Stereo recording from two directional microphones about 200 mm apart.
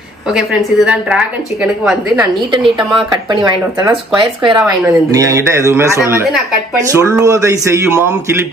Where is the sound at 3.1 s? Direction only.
20° right (ahead or behind).